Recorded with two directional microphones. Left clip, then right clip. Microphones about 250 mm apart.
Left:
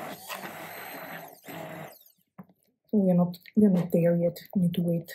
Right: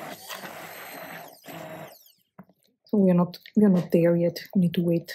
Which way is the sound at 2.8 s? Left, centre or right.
Right.